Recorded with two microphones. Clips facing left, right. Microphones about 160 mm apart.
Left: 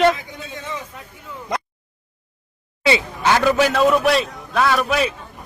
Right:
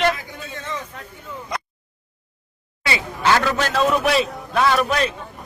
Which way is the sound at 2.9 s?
15° left (ahead or behind).